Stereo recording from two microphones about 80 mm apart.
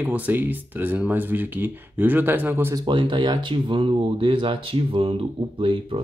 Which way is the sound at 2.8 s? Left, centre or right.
Right.